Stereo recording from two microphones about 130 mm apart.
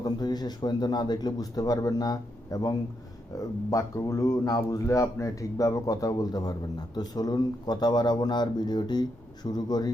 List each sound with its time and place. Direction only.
0.0 s a man's voice: 30° left (ahead or behind)